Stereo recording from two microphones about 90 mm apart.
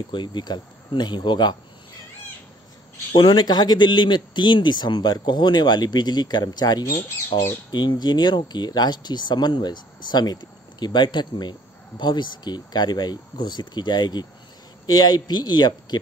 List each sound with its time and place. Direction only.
0.1 s a man's voice: 60° left (ahead or behind)
3.1 s a man's voice: 60° left (ahead or behind)
7.3 s a man's voice: 60° left (ahead or behind)